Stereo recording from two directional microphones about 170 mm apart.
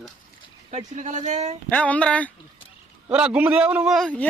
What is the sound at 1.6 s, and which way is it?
Speech, 10° left (ahead or behind).